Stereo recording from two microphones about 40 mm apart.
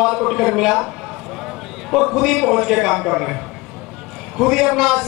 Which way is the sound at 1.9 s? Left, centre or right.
Centre.